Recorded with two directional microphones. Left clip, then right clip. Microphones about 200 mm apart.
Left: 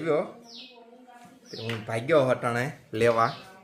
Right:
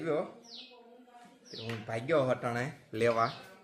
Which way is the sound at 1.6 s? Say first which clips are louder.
Left 7 dB; 10° left (ahead or behind).